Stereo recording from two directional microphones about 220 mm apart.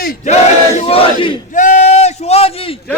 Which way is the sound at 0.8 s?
25° left (ahead or behind).